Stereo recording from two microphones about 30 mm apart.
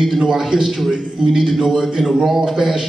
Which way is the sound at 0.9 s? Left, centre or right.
Centre.